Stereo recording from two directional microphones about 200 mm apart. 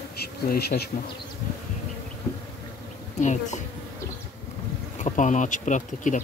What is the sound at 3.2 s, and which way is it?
Speech, 35° left (ahead or behind).